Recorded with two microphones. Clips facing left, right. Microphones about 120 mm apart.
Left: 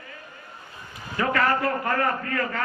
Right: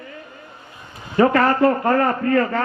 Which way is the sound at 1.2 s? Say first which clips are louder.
Right 8 dB; 30° right (ahead or behind).